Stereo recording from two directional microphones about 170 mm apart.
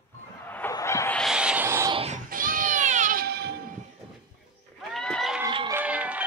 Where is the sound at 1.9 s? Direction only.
35° right (ahead or behind).